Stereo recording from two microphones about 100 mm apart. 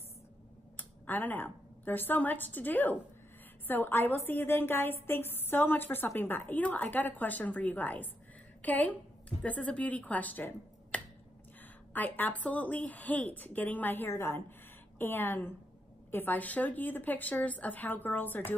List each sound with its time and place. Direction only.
0.7 s a woman's voice: 20° left (ahead or behind)